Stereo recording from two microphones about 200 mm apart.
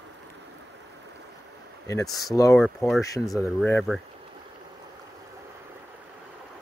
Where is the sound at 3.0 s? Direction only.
15° left (ahead or behind).